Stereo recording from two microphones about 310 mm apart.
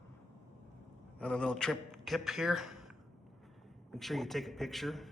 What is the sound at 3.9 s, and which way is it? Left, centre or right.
A man's voice, centre.